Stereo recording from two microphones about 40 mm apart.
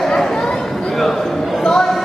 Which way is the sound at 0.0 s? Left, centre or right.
Centre.